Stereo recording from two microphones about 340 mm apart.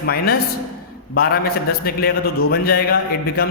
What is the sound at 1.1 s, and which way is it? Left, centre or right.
A man's voice, left.